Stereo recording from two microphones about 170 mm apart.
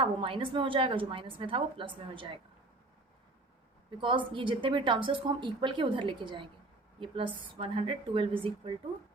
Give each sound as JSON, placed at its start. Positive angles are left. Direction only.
{"t": 0.0, "sound": "a woman's voice", "side_deg": -30}
{"t": 4.0, "sound": "a woman's voice", "side_deg": -30}